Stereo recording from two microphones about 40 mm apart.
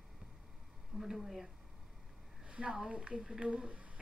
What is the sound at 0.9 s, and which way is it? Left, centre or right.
Speech, centre.